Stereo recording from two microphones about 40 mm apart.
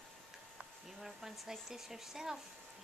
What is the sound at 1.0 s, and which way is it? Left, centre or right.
Speech, centre.